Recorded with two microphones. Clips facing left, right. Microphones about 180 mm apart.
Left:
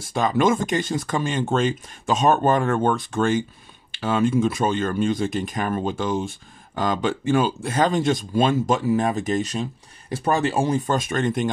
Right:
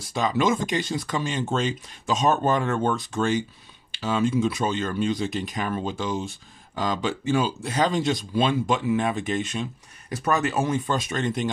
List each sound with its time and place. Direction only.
0.0 s speech: 50° left (ahead or behind); by 10.8 s 30° left (ahead or behind)
10.9 s speech: 50° left (ahead or behind)